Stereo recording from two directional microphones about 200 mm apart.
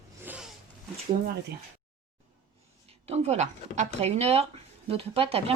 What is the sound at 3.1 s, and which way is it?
A woman's voice, 35° right (ahead or behind).